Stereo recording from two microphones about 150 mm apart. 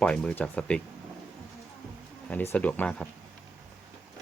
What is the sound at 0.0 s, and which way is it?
Speech, 5° left (ahead or behind).